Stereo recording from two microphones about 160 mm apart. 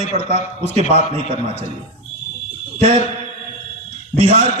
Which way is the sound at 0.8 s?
45° left (ahead or behind).